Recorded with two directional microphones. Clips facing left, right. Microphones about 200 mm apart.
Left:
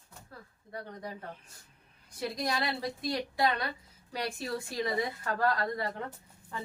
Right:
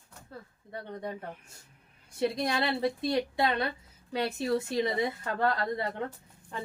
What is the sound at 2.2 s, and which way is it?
Speech, 25° right (ahead or behind).